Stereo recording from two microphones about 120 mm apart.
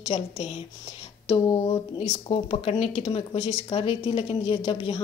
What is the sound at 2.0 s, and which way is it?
Speech, 60° left (ahead or behind).